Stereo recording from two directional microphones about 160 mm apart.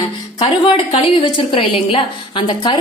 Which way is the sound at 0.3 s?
35° left (ahead or behind).